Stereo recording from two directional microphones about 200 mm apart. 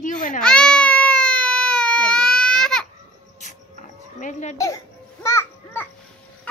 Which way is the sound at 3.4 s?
35° left (ahead or behind).